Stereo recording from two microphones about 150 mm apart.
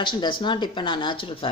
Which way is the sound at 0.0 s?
30° left (ahead or behind).